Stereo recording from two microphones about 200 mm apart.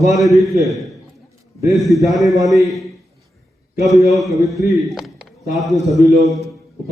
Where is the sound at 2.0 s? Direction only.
Centre (ahead or behind).